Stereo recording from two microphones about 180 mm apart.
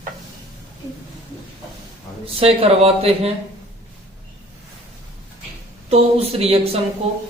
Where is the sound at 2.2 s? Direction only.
30° right (ahead or behind).